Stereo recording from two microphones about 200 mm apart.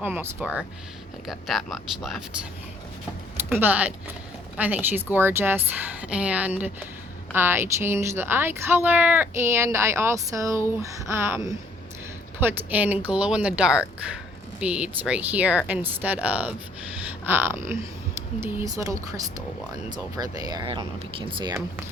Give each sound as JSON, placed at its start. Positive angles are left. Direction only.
{"t": 0.0, "sound": "speech", "side_deg": -10}
{"t": 3.5, "sound": "speech", "side_deg": -10}
{"t": 12.4, "sound": "speech", "side_deg": -10}
{"t": 18.8, "sound": "speech", "side_deg": -15}